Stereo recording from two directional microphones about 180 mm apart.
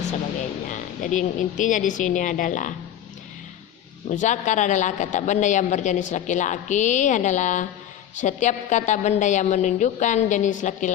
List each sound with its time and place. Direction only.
0.7 s a woman's voice: 45° left (ahead or behind)
4.1 s a woman's voice: 45° left (ahead or behind)